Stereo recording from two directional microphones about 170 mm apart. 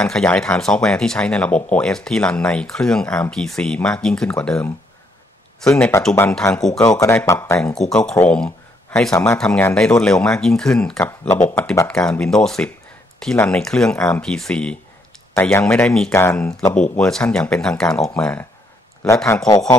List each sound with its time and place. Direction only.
0.0 s speech: 5° left (ahead or behind)
6.8 s speech: 20° left (ahead or behind)
7.7 s speech: 5° left (ahead or behind)
8.5 s a sound: 5° left (ahead or behind)
9.4 s speech: 10° left (ahead or behind)
11.0 s speech: 15° left (ahead or behind)
11.9 s speech: 5° left (ahead or behind)
16.9 s speech: 5° left (ahead or behind)
19.2 s speech: 20° left (ahead or behind)